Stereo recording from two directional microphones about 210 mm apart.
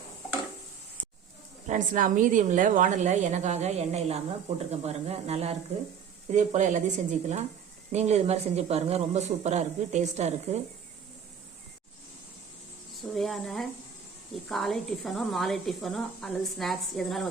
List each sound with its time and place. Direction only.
1.6 s speech: 40° right (ahead or behind)
13.0 s a woman's voice: centre (ahead or behind)